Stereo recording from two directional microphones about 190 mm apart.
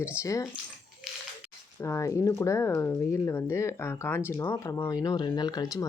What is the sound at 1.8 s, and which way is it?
Speech, 15° left (ahead or behind).